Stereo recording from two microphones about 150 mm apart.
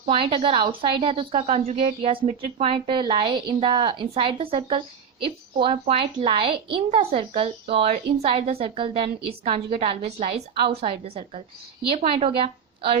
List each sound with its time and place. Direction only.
0.0 s a woman's voice: 35° right (ahead or behind)
7.9 s a woman's voice: 55° right (ahead or behind)
8.4 s a woman's voice: 40° right (ahead or behind)